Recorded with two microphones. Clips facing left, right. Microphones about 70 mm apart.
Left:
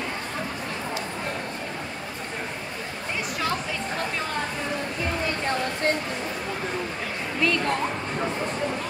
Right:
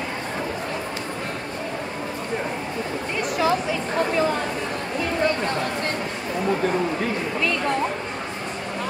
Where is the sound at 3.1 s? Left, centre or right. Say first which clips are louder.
Right 7 dB; centre.